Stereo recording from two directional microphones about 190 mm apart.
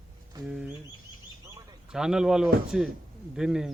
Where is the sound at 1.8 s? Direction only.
5° right (ahead or behind).